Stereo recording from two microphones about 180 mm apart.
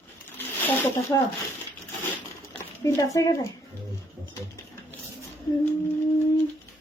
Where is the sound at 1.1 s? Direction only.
25° left (ahead or behind).